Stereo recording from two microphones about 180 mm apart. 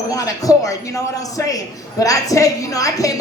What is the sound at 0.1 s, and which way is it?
A woman's voice, 20° left (ahead or behind).